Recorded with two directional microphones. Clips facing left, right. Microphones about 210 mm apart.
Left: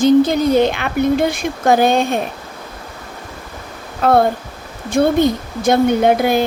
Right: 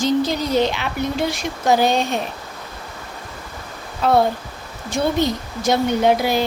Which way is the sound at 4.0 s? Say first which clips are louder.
Left 3 dB; 55° left (ahead or behind).